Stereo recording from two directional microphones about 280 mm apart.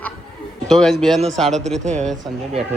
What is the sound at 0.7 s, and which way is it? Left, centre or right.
A man's voice, centre.